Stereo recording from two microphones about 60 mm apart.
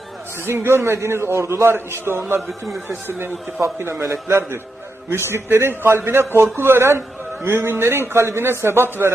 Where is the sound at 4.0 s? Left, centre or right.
Right.